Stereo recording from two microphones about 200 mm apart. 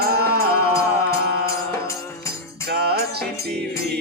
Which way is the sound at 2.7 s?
50° right (ahead or behind).